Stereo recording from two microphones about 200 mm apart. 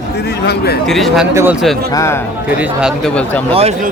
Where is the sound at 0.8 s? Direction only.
Centre (ahead or behind).